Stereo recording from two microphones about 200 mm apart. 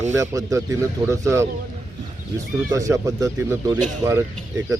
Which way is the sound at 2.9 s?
15° right (ahead or behind).